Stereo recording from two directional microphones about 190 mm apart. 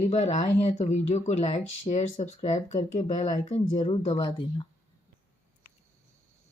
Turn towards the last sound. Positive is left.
turn(degrees=25)  # may be behind; listen again after turning